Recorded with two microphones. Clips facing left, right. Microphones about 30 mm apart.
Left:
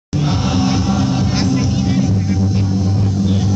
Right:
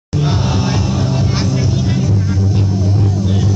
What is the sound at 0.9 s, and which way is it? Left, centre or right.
Vehicle, left.